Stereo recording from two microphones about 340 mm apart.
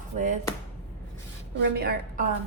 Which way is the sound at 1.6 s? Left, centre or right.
Right.